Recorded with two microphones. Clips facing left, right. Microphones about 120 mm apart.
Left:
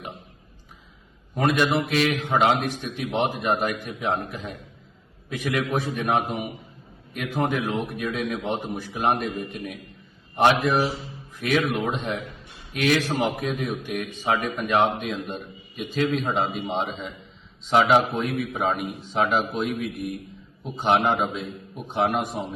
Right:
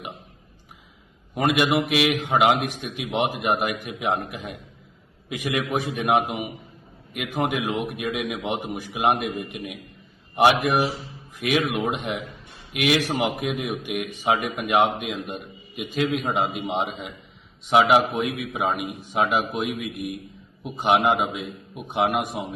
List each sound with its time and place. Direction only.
1.4 s a man's voice: 15° right (ahead or behind)
9.0 s a man's voice: 65° right (ahead or behind)
9.3 s a man's voice: 15° right (ahead or behind)